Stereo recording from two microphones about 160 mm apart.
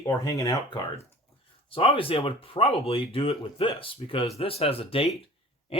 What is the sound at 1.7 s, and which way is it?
Speech, 35° left (ahead or behind).